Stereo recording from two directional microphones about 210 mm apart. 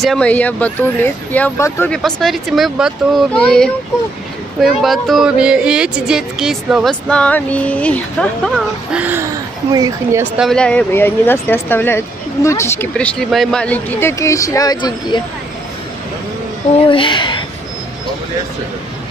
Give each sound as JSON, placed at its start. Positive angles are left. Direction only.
{"t": 0.0, "sound": "speech", "side_deg": 5}
{"t": 10.3, "sound": "speech", "side_deg": 0}
{"t": 16.8, "sound": "a woman's voice", "side_deg": 25}